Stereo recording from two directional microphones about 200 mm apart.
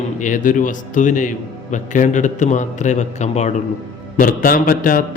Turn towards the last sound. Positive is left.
turn(degrees=45)  # may be behind; listen again after turning